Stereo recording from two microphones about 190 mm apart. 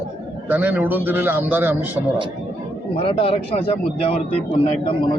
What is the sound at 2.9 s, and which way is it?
A man's voice, 30° left (ahead or behind).